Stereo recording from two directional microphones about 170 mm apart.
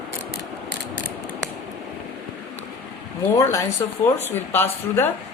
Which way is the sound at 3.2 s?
15° left (ahead or behind).